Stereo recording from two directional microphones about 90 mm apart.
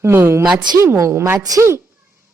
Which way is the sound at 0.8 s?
35° right (ahead or behind).